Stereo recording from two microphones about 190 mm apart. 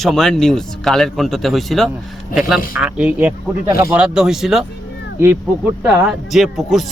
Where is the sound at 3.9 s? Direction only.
5° right (ahead or behind).